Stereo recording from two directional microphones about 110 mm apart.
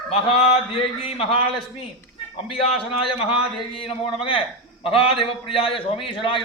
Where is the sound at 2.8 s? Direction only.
55° left (ahead or behind).